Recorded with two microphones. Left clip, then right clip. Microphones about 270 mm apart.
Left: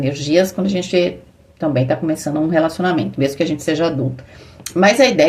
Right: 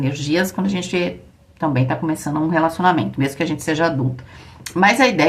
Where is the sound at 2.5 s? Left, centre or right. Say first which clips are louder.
Right 1 dB; centre.